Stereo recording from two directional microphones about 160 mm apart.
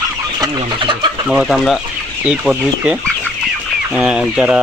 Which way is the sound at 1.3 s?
Centre (ahead or behind).